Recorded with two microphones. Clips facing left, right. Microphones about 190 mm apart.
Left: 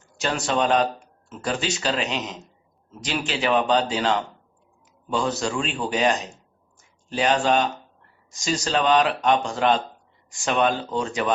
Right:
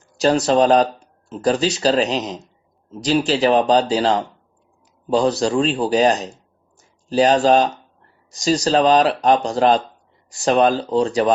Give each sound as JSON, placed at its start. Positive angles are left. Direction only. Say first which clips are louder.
{"t": 0.2, "sound": "speech", "louder": "right 9 dB", "side_deg": -35}